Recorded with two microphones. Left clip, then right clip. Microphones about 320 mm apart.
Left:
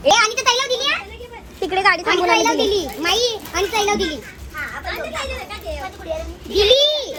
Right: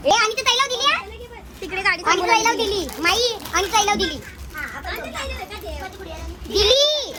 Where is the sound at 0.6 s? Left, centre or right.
Centre.